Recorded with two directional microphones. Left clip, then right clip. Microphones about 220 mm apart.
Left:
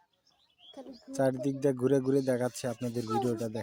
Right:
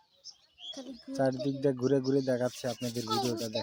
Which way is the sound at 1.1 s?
20° left (ahead or behind).